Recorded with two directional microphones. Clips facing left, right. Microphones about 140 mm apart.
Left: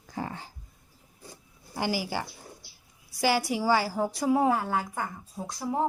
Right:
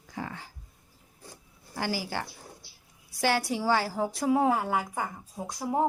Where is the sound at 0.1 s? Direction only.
35° left (ahead or behind).